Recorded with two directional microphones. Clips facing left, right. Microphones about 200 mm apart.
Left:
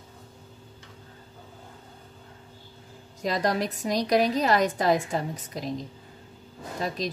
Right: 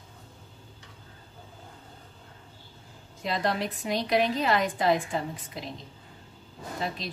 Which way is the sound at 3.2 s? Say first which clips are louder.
Left 3 dB; 40° left (ahead or behind).